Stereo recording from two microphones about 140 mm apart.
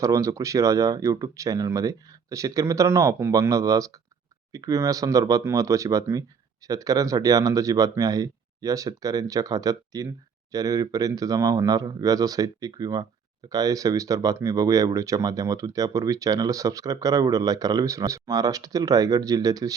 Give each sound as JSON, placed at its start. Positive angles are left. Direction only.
{"t": 0.0, "sound": "speech", "side_deg": -25}